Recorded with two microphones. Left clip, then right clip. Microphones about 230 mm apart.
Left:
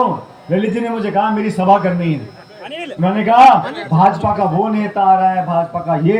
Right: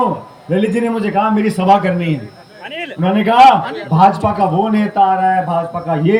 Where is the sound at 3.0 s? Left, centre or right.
Right.